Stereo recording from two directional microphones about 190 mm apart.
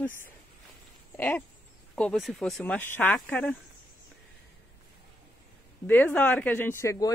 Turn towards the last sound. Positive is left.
turn(degrees=15)  # may be behind; listen again after turning